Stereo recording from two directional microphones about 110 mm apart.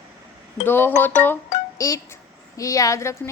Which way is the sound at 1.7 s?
30° left (ahead or behind).